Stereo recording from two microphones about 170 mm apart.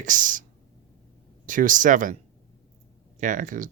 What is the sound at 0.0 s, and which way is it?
Speech, 50° right (ahead or behind).